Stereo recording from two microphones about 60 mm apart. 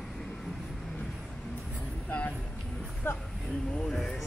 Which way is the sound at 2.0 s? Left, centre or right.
Left.